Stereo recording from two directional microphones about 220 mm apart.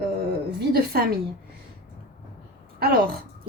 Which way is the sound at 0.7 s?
45° right (ahead or behind).